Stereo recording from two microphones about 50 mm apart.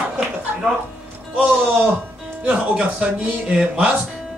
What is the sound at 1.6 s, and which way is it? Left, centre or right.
Speech, right.